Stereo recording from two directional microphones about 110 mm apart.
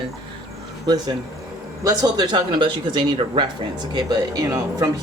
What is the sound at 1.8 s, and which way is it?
Speech, 35° right (ahead or behind).